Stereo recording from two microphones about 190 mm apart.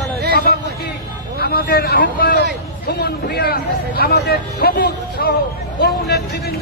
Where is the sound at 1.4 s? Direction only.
55° left (ahead or behind).